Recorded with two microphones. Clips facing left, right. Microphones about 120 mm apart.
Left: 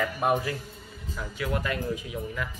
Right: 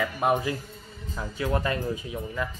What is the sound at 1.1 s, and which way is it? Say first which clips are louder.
Speech: right 3 dB; 30° right (ahead or behind).